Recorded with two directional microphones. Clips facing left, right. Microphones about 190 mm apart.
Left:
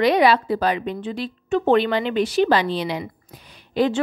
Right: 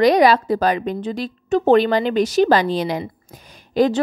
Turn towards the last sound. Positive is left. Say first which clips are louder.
# right 3 dB
turn(degrees=-40)  # may be behind; listen again after turning